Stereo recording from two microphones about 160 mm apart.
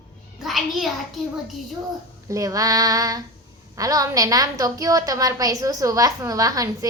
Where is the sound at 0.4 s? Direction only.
Centre (ahead or behind).